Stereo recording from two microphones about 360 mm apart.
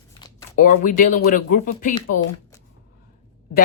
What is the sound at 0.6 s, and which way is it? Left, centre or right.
Speech, left.